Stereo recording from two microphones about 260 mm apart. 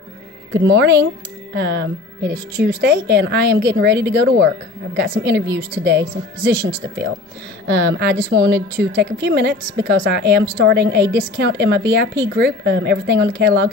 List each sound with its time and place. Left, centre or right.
0.5 s a woman's voice: right